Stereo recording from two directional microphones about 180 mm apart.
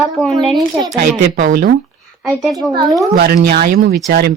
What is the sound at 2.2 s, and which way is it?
Speech, centre (ahead or behind).